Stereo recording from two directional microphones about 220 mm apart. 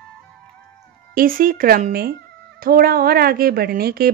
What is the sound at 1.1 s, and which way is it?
Speech, 40° right (ahead or behind).